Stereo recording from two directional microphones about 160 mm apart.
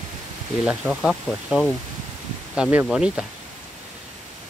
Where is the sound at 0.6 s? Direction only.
Centre (ahead or behind).